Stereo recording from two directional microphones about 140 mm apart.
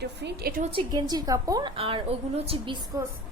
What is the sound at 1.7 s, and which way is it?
A woman's voice, 40° right (ahead or behind).